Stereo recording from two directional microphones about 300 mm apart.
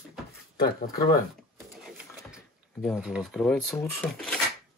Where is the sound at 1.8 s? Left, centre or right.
Centre.